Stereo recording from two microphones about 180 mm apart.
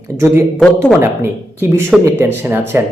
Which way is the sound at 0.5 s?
5° left (ahead or behind).